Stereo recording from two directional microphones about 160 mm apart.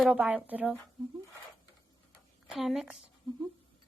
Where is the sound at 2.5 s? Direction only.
Centre (ahead or behind).